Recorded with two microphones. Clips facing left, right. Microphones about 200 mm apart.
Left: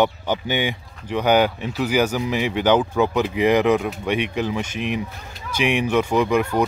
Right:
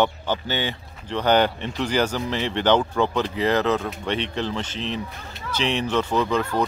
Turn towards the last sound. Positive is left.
turn(degrees=15)  # may be behind; listen again after turning